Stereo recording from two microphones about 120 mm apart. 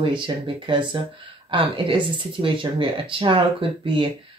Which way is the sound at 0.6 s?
45° right (ahead or behind).